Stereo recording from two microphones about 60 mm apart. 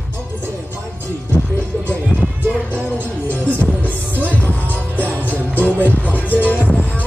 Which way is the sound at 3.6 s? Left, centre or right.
Left.